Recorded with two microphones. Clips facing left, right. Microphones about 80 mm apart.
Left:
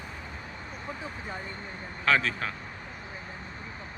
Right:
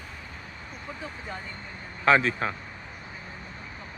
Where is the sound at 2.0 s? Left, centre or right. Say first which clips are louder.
Right 4 dB; right.